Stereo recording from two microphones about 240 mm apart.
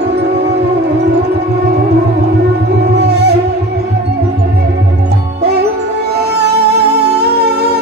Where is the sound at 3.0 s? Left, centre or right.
Right.